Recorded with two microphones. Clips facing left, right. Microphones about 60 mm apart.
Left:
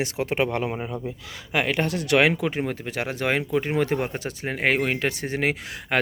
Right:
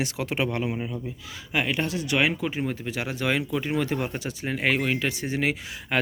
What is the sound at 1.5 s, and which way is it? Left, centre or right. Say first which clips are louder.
Speech: left 2 dB; left.